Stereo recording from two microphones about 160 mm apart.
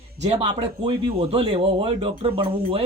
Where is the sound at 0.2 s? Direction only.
40° right (ahead or behind).